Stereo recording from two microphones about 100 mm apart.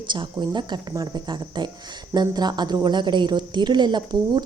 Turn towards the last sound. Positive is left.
turn(degrees=-50)  # may be behind; listen again after turning